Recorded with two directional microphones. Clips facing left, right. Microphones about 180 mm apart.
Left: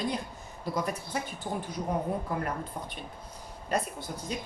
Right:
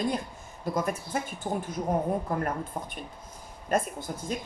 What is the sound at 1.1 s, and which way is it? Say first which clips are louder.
Speech: right 2 dB; 50° right (ahead or behind).